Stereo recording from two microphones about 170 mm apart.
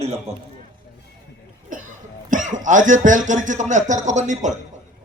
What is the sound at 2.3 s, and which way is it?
Speech, 45° right (ahead or behind).